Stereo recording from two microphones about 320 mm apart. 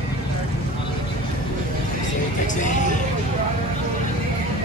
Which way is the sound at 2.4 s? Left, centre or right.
Left.